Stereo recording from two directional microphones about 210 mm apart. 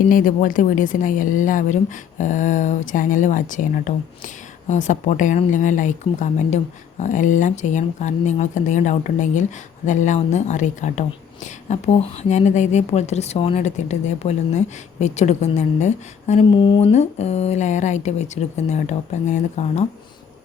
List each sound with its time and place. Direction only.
0.1 s speech: 40° left (ahead or behind)